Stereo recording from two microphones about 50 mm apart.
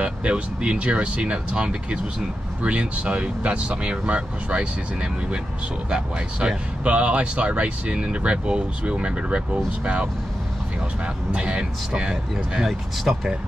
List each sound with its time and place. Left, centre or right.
0.0 s speech: right
11.3 s speech: right
12.6 s speech: centre